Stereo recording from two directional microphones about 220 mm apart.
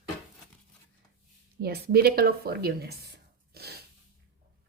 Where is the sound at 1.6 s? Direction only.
45° right (ahead or behind).